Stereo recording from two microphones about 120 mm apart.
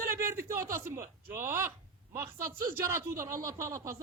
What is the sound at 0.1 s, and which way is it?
A man's voice, 25° right (ahead or behind).